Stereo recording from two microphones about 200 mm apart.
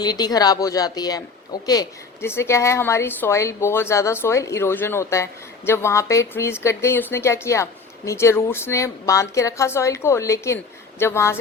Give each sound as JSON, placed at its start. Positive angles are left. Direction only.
{"t": 0.0, "sound": "a woman's voice", "side_deg": 20}